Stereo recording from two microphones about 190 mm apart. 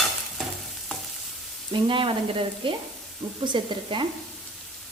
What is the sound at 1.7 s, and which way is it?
Frying, 25° right (ahead or behind).